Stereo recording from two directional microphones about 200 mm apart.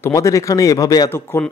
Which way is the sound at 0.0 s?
15° left (ahead or behind).